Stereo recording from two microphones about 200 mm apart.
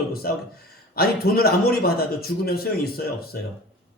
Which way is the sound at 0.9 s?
50° left (ahead or behind).